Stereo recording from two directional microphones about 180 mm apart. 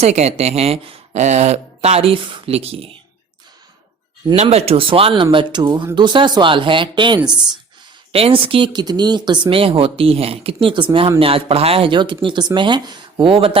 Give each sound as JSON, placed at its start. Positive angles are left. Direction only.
{"t": 0.0, "sound": "speech", "side_deg": -35}
{"t": 4.4, "sound": "speech", "side_deg": -35}